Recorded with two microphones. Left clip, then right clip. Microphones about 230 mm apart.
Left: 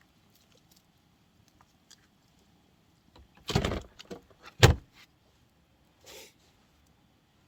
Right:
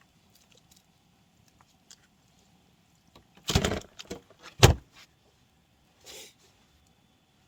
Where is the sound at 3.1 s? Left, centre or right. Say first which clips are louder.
Right 3 dB; right.